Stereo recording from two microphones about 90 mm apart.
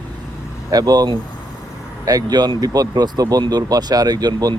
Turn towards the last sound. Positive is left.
turn(degrees=-45)  # may be behind; listen again after turning